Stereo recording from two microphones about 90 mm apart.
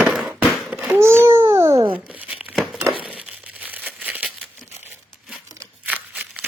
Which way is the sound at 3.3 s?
15° right (ahead or behind).